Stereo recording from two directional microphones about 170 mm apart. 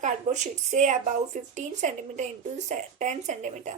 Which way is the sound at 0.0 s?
45° right (ahead or behind).